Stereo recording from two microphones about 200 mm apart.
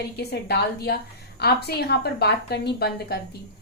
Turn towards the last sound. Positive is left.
turn(degrees=55)  # may be behind; listen again after turning